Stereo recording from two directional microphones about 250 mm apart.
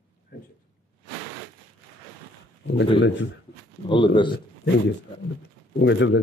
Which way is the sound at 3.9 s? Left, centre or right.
Centre.